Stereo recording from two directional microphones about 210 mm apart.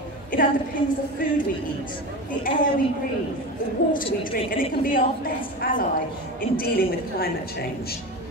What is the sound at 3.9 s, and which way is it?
A woman's voice, 40° left (ahead or behind).